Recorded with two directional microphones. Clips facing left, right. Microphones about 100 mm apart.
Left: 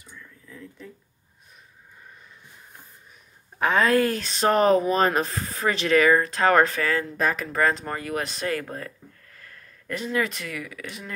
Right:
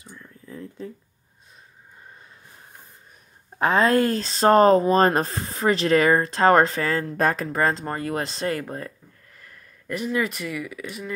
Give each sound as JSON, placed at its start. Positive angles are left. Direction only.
{"t": 0.1, "sound": "a sound", "side_deg": -35}
{"t": 3.5, "sound": "speech", "side_deg": -30}
{"t": 7.5, "sound": "speech", "side_deg": -30}
{"t": 9.4, "sound": "speech", "side_deg": -15}